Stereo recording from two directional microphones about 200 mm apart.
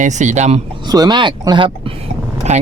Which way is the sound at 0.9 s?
20° right (ahead or behind).